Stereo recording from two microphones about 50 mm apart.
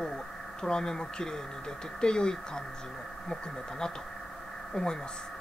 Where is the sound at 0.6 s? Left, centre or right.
Centre.